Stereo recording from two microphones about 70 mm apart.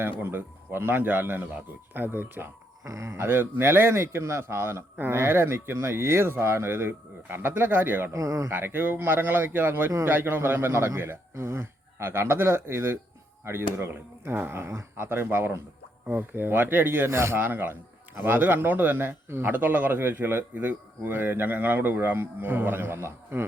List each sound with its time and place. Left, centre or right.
0.0 s a man's voice: right
2.8 s speech: right
8.1 s speech: right
8.5 s a man's voice: right